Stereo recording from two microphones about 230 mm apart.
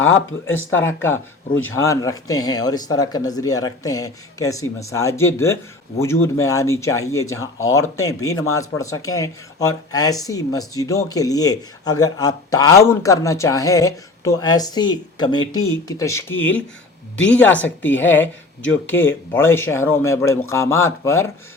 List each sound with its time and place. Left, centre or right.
0.0 s speech: left
0.9 s speech: centre